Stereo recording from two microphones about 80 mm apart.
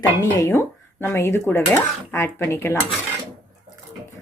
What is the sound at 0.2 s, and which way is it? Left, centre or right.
Speech, left.